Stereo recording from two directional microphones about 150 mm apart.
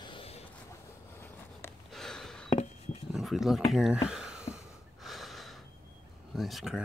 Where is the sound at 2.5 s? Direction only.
50° left (ahead or behind).